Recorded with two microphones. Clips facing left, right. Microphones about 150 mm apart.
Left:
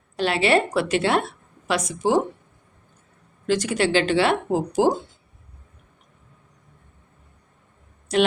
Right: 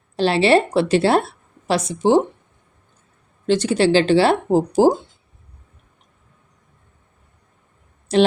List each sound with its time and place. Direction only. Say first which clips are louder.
0.2 s a woman's voice: right 5 dB; 30° right (ahead or behind)
3.4 s a woman's voice: right 5 dB; 30° right (ahead or behind)
8.1 s a woman's voice: right 4 dB; 30° right (ahead or behind)